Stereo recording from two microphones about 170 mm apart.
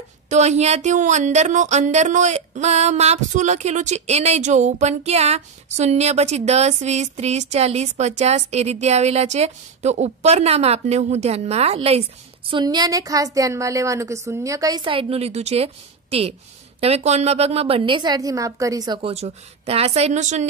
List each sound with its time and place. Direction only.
0.3 s speech: 40° right (ahead or behind)
12.4 s a woman's voice: 25° right (ahead or behind)
18.9 s speech: 35° right (ahead or behind)